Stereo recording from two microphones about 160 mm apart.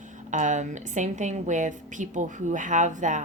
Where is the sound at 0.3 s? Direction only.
50° right (ahead or behind).